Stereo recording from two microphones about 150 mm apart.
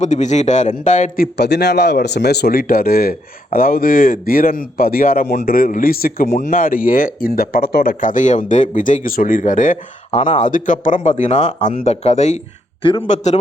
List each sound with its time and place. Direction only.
0.0 s speech: 50° left (ahead or behind)
1.1 s a man's voice: 85° left; by 9.7 s 60° left (ahead or behind)
10.1 s speech: 45° left (ahead or behind)